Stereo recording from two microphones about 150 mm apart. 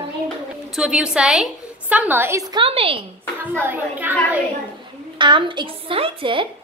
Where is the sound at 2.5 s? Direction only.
40° right (ahead or behind).